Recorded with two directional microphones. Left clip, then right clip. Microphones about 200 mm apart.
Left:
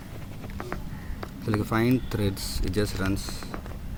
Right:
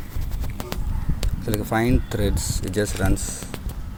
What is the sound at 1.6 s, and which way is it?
Speech, 10° left (ahead or behind).